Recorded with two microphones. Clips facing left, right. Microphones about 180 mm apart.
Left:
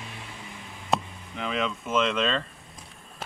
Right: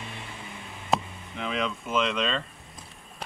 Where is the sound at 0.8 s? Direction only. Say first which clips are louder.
Even; centre (ahead or behind).